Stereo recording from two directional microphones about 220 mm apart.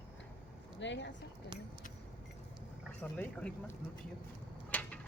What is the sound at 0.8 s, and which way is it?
Speech, 55° left (ahead or behind).